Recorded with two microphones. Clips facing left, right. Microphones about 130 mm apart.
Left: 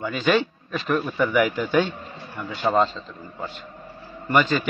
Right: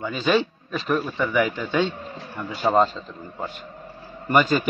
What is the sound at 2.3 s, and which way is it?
Speech, 10° right (ahead or behind).